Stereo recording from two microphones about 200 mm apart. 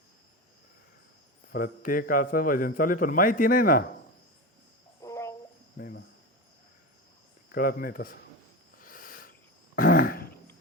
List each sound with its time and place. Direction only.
1.5 s a man's voice: 45° left (ahead or behind)
4.9 s a sound: 15° left (ahead or behind)
5.7 s cricket: 55° left (ahead or behind)
7.5 s a man's voice: 45° left (ahead or behind)
8.8 s cricket: 45° left (ahead or behind)
9.7 s throat clearing: 45° left (ahead or behind)